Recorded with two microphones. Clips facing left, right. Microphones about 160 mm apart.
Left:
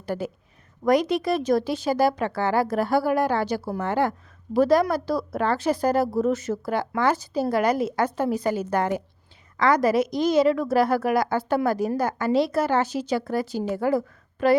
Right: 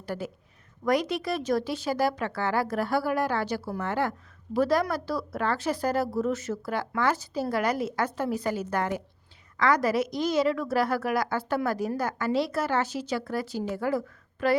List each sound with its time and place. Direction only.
0.0 s a woman's voice: 20° left (ahead or behind)